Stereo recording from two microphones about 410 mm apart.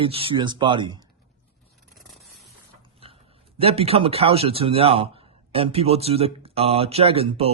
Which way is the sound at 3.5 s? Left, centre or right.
Centre.